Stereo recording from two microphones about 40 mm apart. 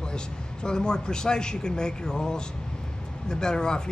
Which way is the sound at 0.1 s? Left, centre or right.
Left.